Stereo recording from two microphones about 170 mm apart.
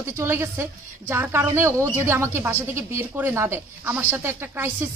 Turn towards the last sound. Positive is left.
turn(degrees=-15)  # may be behind; listen again after turning